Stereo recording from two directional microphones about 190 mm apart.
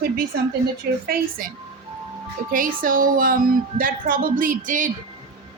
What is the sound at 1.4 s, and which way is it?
Speech, 45° right (ahead or behind).